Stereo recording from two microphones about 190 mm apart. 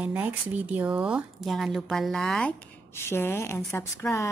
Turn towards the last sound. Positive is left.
turn(degrees=15)  # may be behind; listen again after turning